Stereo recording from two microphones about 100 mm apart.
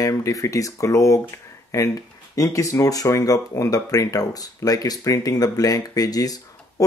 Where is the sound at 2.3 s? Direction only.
35° left (ahead or behind).